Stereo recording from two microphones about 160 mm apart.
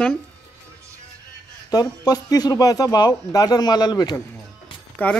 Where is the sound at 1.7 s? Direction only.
25° left (ahead or behind).